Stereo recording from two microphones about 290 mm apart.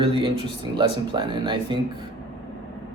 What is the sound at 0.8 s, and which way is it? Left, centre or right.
A man's voice, centre.